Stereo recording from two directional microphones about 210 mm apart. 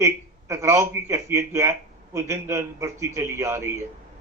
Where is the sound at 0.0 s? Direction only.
15° right (ahead or behind).